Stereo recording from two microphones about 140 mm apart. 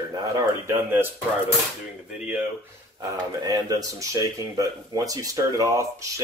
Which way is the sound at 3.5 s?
25° right (ahead or behind).